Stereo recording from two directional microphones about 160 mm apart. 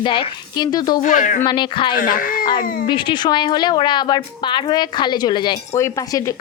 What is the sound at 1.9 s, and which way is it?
Speech, 60° left (ahead or behind).